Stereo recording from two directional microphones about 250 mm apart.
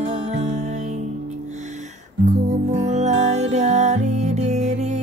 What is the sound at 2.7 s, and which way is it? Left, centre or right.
Music, right.